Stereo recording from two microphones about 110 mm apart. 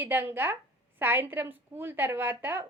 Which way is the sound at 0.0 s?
20° right (ahead or behind).